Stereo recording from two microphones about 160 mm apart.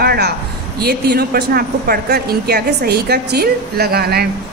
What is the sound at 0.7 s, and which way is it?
A woman's voice, 75° right (ahead or behind).